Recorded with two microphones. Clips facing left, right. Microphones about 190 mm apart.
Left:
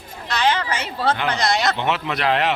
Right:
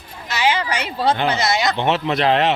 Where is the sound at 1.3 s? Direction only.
5° right (ahead or behind).